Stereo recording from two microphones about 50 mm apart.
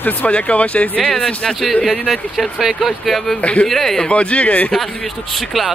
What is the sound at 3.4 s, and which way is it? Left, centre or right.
Speech, left.